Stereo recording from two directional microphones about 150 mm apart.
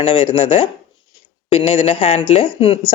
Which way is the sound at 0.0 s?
35° left (ahead or behind).